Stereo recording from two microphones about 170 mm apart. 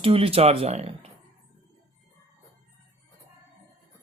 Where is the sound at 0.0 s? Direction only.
35° right (ahead or behind).